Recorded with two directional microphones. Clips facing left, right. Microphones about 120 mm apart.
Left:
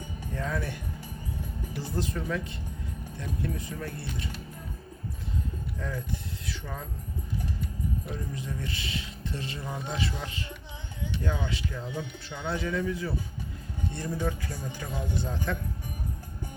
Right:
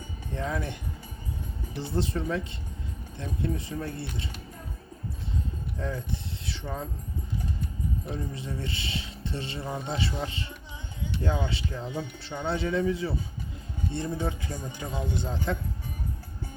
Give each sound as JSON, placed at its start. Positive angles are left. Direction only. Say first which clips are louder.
{"t": 0.3, "sound": "speech", "louder": "right 1 dB", "side_deg": -20}
{"t": 6.5, "sound": "speech", "louder": "right 4 dB", "side_deg": -25}
{"t": 8.0, "sound": "speech", "louder": "right 1 dB", "side_deg": -30}
{"t": 12.5, "sound": "speech", "louder": "right 3 dB", "side_deg": -25}